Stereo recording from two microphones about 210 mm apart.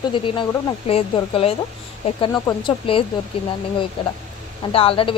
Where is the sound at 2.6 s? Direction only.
25° left (ahead or behind).